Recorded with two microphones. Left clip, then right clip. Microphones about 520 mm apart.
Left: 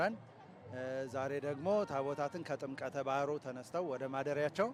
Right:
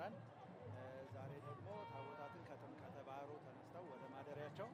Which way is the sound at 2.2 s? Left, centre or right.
Left.